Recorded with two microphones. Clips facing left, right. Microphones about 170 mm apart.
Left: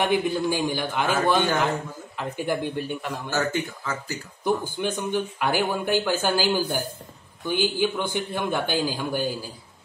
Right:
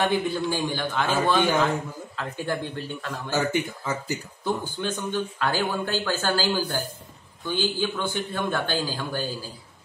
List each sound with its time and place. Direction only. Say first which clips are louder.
0.0 s speech: left 1 dB; 15° left (ahead or behind)
3.3 s speech: right 2 dB; 15° right (ahead or behind)
4.5 s speech: left 3 dB; 15° left (ahead or behind)